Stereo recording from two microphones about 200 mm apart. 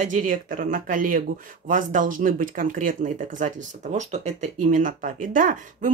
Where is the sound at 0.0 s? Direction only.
40° right (ahead or behind).